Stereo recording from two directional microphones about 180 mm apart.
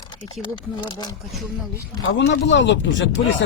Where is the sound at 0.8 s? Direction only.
25° left (ahead or behind).